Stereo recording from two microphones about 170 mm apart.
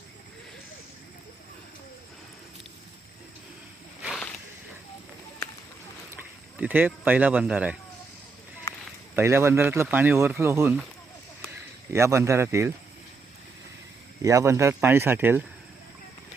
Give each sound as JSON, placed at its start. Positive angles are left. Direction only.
{"t": 4.0, "sound": "a sound", "side_deg": 0}
{"t": 6.1, "sound": "speech", "side_deg": -10}
{"t": 8.7, "sound": "a sound", "side_deg": 15}
{"t": 9.1, "sound": "speech", "side_deg": -15}
{"t": 11.9, "sound": "speech", "side_deg": -15}
{"t": 14.2, "sound": "speech", "side_deg": -20}